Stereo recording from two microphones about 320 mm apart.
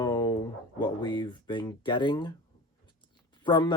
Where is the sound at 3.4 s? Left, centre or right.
Centre.